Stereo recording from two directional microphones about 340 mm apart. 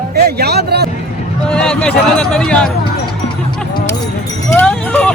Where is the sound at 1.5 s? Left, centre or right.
Centre.